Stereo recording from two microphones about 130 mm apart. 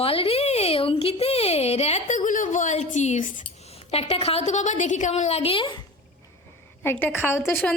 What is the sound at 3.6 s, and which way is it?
A woman's voice, 50° left (ahead or behind).